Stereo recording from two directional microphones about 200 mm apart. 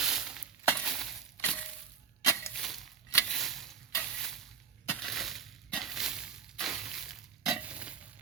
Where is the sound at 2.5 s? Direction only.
Centre (ahead or behind).